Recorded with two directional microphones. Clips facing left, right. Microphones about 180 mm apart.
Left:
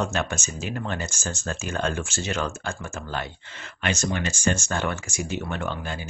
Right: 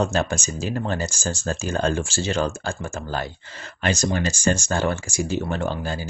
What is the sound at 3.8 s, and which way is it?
Speech, 35° right (ahead or behind).